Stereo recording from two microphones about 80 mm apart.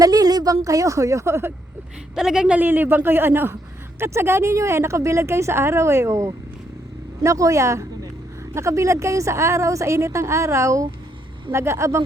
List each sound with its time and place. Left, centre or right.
0.0 s a woman's voice: right
2.1 s speech: centre
2.6 s a man's voice: right